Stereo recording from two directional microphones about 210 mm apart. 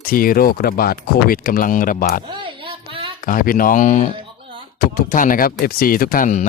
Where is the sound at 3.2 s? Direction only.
40° left (ahead or behind).